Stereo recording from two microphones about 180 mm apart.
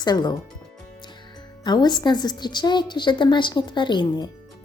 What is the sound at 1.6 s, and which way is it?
Speech, 25° left (ahead or behind).